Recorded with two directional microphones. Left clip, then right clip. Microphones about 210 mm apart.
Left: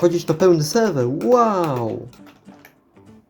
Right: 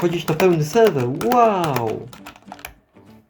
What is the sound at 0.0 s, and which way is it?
Speech, 15° left (ahead or behind).